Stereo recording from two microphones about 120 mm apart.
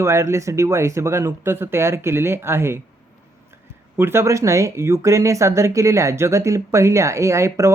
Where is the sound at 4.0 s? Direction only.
20° right (ahead or behind).